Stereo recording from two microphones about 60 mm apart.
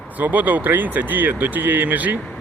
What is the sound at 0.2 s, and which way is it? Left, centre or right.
Speech, right.